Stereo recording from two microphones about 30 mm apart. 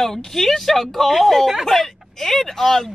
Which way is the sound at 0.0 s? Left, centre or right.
Centre.